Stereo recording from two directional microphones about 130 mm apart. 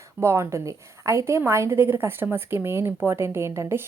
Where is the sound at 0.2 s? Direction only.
20° right (ahead or behind).